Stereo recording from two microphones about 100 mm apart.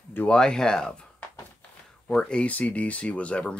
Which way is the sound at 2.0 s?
10° left (ahead or behind).